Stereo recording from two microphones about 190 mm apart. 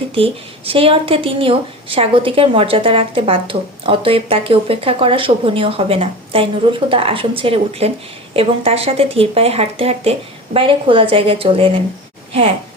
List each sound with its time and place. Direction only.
0.1 s speech: 30° right (ahead or behind)